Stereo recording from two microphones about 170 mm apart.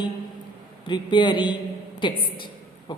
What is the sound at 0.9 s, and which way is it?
Speech, 25° left (ahead or behind).